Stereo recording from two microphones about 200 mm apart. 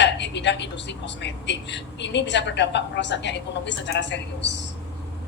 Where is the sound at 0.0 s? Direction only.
60° left (ahead or behind).